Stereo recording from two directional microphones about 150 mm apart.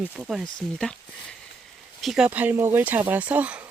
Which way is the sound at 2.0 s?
Centre (ahead or behind).